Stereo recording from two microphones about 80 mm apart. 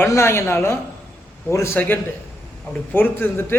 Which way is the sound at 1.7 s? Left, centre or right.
Left.